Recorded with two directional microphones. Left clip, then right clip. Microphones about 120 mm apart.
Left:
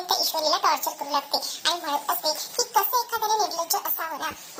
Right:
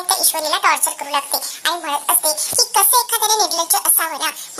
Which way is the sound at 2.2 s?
25° right (ahead or behind).